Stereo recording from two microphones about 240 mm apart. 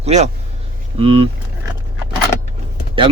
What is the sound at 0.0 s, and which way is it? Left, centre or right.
Speech, right.